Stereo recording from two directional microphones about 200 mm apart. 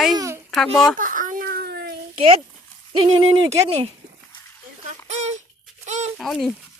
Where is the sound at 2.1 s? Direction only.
25° right (ahead or behind).